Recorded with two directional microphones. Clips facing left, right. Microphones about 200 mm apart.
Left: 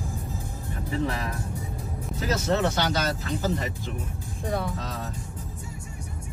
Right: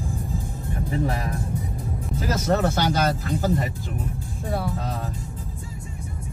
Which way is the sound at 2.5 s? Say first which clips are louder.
Right 4 dB; 50° right (ahead or behind).